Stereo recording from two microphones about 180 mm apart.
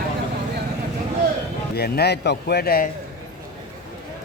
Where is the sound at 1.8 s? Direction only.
60° left (ahead or behind).